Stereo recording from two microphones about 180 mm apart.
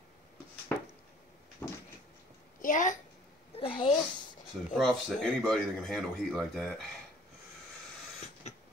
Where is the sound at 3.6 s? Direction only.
30° left (ahead or behind).